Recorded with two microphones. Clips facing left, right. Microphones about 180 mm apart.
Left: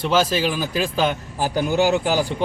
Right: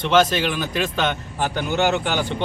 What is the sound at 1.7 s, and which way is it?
Speech, 35° left (ahead or behind).